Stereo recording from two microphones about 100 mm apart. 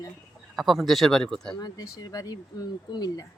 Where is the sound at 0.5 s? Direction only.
Centre (ahead or behind).